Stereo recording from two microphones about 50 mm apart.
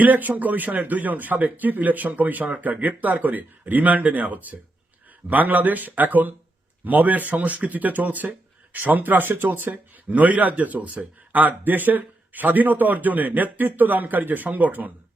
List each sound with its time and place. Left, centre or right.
0.0 s speech: right